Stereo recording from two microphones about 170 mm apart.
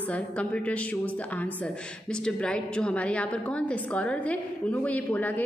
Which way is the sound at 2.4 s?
5° left (ahead or behind).